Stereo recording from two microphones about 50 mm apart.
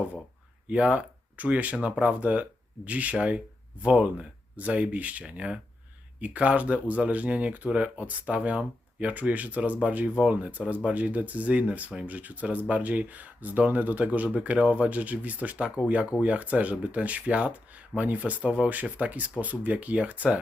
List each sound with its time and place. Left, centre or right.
0.7 s speech: right